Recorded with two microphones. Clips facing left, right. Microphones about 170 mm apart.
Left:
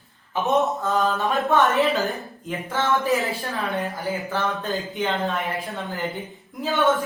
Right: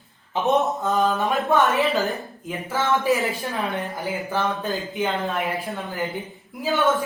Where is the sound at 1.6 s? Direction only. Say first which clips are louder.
Even; centre (ahead or behind).